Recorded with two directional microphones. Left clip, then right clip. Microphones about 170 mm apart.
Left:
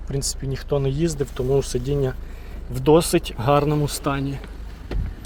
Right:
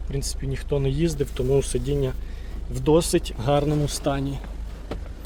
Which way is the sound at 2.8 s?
15° left (ahead or behind).